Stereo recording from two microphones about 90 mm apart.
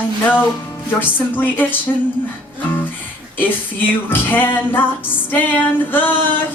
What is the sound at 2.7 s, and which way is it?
Music, 20° left (ahead or behind).